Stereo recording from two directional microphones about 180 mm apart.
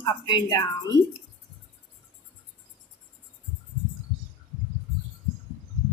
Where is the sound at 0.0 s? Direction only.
25° left (ahead or behind).